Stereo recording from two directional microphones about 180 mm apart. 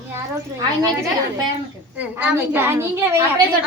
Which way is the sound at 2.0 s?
10° right (ahead or behind).